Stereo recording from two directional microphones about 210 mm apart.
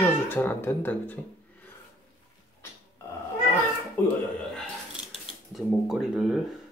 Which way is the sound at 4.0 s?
10° left (ahead or behind).